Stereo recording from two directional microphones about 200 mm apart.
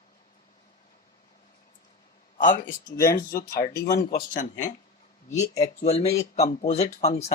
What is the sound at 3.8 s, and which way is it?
Speech, 50° left (ahead or behind).